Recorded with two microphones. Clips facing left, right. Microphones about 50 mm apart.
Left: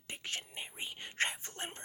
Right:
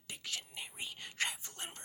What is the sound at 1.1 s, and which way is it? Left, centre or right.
Whispering, left.